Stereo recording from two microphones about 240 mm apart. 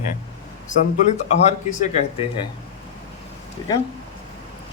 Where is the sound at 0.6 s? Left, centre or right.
Left.